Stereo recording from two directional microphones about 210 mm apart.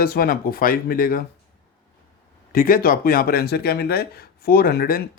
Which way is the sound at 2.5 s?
40° left (ahead or behind).